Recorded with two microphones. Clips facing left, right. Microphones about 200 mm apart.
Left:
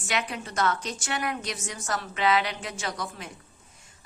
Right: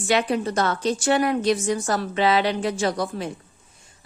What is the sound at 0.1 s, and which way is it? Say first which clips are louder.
A woman's voice: right 10 dB; 35° right (ahead or behind).